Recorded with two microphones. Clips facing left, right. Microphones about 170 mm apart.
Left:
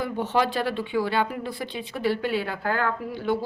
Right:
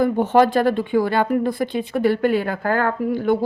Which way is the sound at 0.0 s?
50° right (ahead or behind).